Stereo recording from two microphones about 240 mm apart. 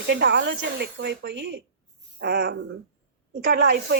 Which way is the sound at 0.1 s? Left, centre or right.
Right.